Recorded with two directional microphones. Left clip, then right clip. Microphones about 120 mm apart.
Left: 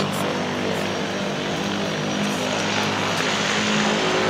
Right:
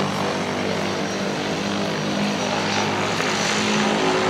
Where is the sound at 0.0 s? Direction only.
30° right (ahead or behind).